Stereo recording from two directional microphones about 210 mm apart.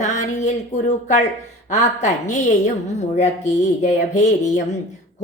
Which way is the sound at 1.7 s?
35° left (ahead or behind).